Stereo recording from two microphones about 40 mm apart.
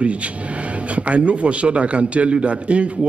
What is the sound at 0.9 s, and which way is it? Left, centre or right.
A man's voice, right.